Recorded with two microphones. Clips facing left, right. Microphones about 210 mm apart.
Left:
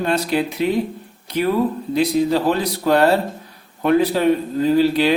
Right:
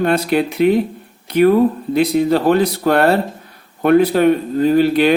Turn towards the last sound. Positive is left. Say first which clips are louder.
# right 3 dB
turn(degrees=-60)  # may be behind; listen again after turning